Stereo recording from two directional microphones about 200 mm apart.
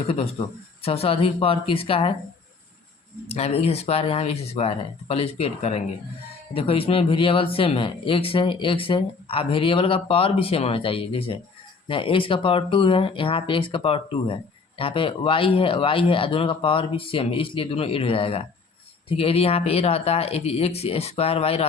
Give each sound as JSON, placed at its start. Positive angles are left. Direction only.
{"t": 0.1, "sound": "speech", "side_deg": 25}
{"t": 3.2, "sound": "speech", "side_deg": 30}